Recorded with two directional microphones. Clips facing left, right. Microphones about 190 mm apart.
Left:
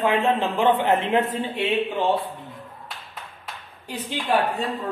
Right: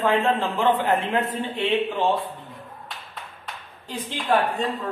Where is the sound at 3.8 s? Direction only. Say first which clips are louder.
Left 1 dB; 10° left (ahead or behind).